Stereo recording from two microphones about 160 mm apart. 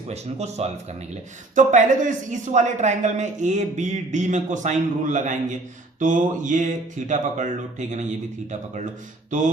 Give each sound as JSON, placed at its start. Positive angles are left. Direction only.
{"t": 0.1, "sound": "speech", "side_deg": -45}